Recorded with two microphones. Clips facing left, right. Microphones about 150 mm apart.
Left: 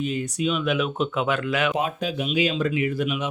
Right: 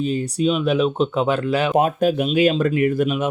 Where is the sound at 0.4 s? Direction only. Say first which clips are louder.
Right 6 dB; 35° right (ahead or behind).